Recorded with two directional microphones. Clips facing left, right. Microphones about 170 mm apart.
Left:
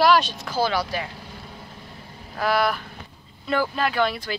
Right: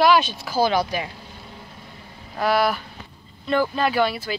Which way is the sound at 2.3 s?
Centre (ahead or behind).